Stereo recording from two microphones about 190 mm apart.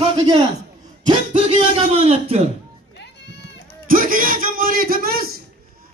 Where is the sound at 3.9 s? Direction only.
45° right (ahead or behind).